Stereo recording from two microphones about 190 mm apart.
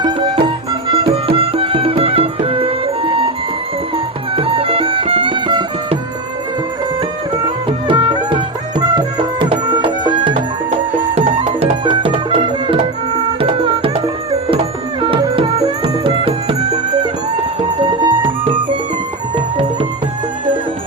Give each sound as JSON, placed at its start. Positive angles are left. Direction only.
{"t": 0.0, "sound": "music", "side_deg": -25}
{"t": 7.4, "sound": "music", "side_deg": -25}